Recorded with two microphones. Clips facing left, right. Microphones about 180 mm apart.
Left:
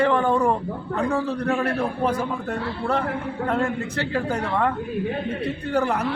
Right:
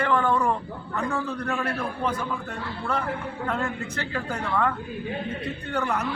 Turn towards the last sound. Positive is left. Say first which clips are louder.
# left 5 dB
turn(degrees=35)  # may be behind; listen again after turning